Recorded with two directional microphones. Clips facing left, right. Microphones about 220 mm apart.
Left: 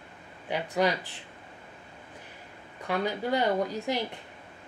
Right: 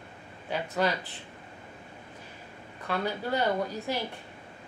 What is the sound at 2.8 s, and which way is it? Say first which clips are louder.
A woman's voice: left 2 dB; 15° left (ahead or behind).